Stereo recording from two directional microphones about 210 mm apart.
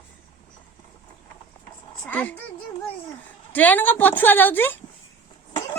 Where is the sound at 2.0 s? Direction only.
10° left (ahead or behind).